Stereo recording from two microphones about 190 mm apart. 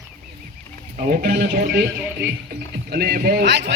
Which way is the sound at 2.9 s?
50° right (ahead or behind).